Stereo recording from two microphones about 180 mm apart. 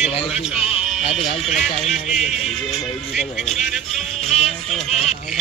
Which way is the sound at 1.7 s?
40° left (ahead or behind).